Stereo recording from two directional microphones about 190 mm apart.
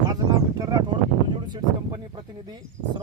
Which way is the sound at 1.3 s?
25° right (ahead or behind).